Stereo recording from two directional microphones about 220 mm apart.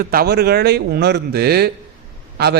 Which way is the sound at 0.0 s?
40° right (ahead or behind).